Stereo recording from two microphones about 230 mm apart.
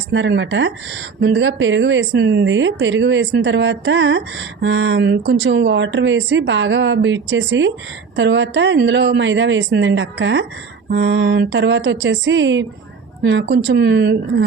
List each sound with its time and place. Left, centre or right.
0.1 s speech: right